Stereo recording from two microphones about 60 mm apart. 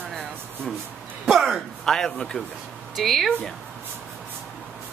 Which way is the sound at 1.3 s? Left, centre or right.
Centre.